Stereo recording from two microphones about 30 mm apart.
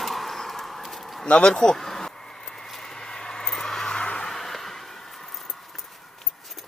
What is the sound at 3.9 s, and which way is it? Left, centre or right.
Music, left.